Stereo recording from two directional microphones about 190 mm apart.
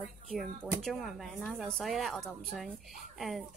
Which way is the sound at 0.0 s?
Centre (ahead or behind).